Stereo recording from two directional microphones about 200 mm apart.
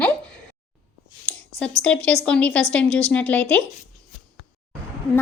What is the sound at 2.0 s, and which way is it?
A woman's voice, 5° left (ahead or behind).